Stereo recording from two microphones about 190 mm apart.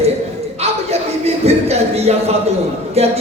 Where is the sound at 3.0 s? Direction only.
35° right (ahead or behind).